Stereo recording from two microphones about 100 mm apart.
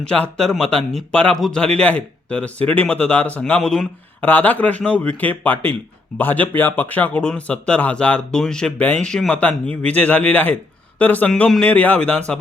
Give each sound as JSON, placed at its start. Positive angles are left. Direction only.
{"t": 0.0, "sound": "speech", "side_deg": 10}